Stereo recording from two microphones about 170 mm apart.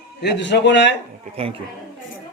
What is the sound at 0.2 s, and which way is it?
Speech, 90° left.